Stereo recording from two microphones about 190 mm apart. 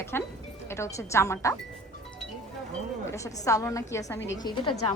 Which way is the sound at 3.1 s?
15° left (ahead or behind).